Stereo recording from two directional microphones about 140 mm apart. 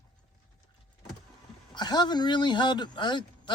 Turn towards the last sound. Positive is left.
turn(degrees=35)  # may be behind; listen again after turning